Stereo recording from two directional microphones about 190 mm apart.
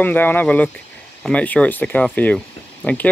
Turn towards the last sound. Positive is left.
turn(degrees=5)  # may be behind; listen again after turning